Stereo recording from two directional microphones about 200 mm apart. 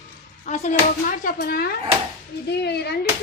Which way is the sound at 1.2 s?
50° left (ahead or behind).